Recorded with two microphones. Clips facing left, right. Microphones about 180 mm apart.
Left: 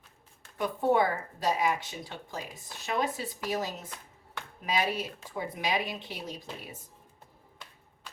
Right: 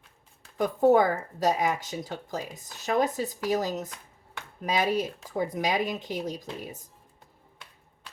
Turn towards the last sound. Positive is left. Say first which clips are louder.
# right 7 dB
turn(degrees=-40)  # may be behind; listen again after turning